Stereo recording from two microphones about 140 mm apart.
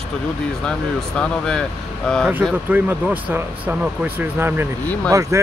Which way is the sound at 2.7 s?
10° right (ahead or behind).